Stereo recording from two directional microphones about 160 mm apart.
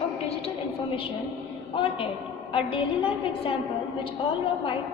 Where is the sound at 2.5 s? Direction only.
35° left (ahead or behind).